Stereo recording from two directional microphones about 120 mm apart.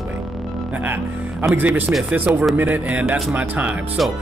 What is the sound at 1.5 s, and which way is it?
Speech, 15° right (ahead or behind).